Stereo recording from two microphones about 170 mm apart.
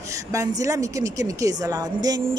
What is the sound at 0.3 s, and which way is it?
A woman's voice, 20° right (ahead or behind).